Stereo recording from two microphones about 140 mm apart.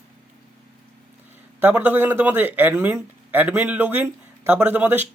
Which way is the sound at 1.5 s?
15° right (ahead or behind).